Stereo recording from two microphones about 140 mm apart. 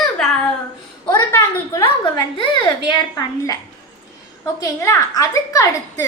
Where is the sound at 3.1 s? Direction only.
25° left (ahead or behind).